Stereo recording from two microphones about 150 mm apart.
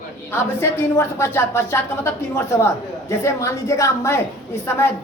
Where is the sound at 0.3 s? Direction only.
15° left (ahead or behind).